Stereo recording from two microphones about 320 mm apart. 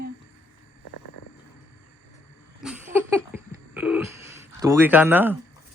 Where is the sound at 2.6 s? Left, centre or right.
Centre.